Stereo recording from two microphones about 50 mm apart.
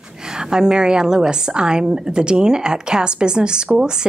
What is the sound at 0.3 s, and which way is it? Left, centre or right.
Speech, centre.